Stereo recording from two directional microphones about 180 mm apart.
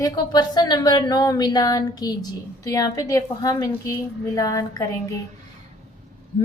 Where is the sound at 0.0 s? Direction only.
25° left (ahead or behind).